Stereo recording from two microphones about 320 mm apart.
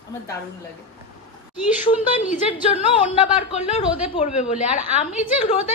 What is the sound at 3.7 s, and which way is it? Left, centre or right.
A woman's voice, left.